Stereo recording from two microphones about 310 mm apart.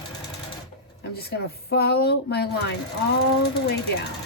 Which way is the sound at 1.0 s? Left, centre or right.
Left.